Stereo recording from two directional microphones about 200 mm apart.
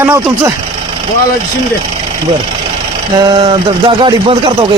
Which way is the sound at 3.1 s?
30° right (ahead or behind).